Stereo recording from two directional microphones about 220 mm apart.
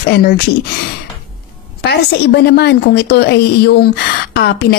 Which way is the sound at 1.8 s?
45° left (ahead or behind).